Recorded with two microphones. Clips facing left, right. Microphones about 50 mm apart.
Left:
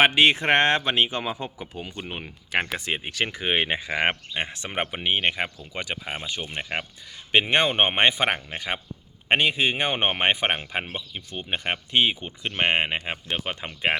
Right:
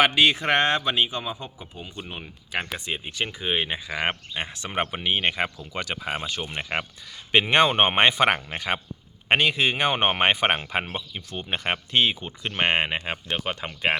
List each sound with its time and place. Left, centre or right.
0.0 s speech: left
2.0 s speech: left
2.5 s speech: left
4.4 s speech: left
4.7 s speech: centre
6.5 s speech: centre
7.3 s speech: centre
11.9 s speech: centre